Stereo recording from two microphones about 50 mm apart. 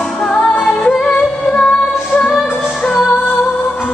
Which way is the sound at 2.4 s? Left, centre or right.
Centre.